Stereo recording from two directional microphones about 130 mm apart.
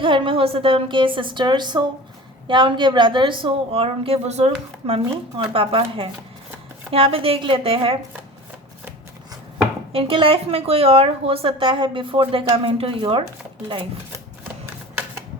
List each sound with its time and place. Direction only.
0.0 s a woman's voice: 40° right (ahead or behind)
5.5 s speech: 45° right (ahead or behind)
9.9 s speech: 45° right (ahead or behind)